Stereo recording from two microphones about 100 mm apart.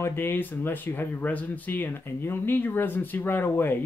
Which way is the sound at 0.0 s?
20° left (ahead or behind).